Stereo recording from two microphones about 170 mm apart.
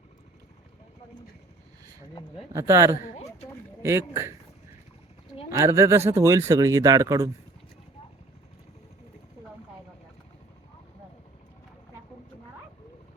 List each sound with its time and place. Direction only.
2.5 s speech: 20° right (ahead or behind)
5.5 s speech: 15° right (ahead or behind)